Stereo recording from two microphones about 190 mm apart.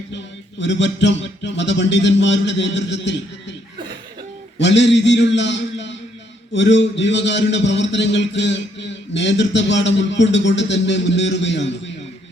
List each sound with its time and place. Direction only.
0.6 s a man's voice: 70° left (ahead or behind)
4.5 s a man's voice: 70° left (ahead or behind)